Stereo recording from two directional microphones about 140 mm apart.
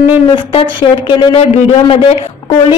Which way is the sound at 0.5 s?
40° left (ahead or behind).